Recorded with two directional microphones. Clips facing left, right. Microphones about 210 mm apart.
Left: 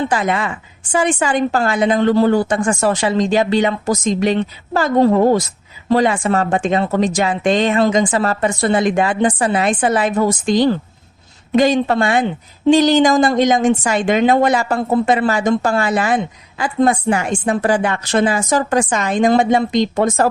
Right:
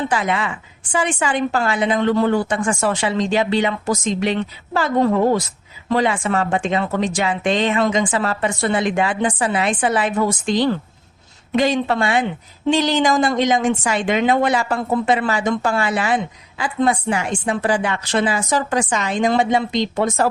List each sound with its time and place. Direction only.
0.1 s a woman's voice: 45° left (ahead or behind)